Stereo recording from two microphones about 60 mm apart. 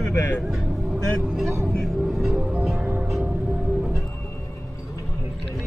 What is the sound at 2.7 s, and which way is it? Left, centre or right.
Music, right.